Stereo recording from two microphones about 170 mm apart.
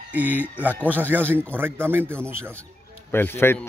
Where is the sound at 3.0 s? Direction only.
15° left (ahead or behind).